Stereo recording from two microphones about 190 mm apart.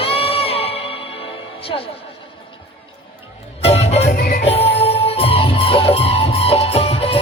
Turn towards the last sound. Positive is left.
turn(degrees=30)  # may be behind; listen again after turning